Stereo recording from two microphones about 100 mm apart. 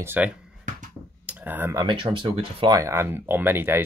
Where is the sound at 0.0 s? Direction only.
20° right (ahead or behind).